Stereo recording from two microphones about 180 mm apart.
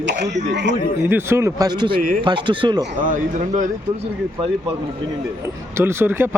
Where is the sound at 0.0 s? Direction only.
70° right (ahead or behind).